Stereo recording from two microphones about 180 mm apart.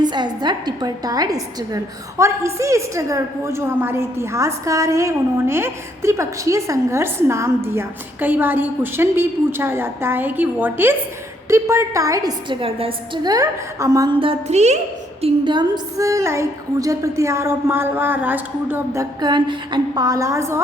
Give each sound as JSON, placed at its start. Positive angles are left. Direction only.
{"t": 0.0, "sound": "a woman's voice", "side_deg": -25}
{"t": 14.2, "sound": "speech", "side_deg": -35}
{"t": 15.2, "sound": "a woman's voice", "side_deg": -25}
{"t": 19.2, "sound": "a woman's voice", "side_deg": -25}